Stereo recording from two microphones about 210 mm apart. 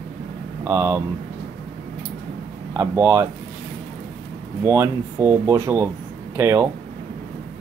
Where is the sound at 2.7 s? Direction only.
10° right (ahead or behind).